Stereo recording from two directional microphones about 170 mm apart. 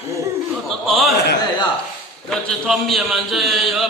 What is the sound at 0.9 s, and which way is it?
Speech, centre (ahead or behind).